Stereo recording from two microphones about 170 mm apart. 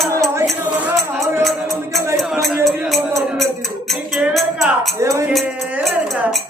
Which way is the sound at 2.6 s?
Centre (ahead or behind).